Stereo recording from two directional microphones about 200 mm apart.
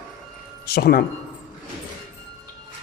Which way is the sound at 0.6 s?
55° left (ahead or behind).